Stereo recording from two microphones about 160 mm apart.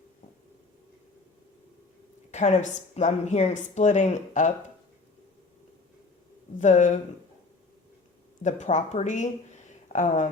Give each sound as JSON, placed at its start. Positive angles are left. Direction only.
{"t": 2.3, "sound": "a woman's voice", "side_deg": 45}
{"t": 6.6, "sound": "a woman's voice", "side_deg": 50}
{"t": 8.4, "sound": "a woman's voice", "side_deg": 50}